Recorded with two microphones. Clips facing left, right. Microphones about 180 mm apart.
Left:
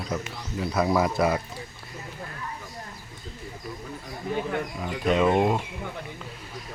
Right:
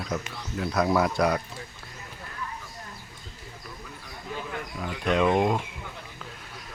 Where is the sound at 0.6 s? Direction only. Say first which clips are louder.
Even; centre (ahead or behind).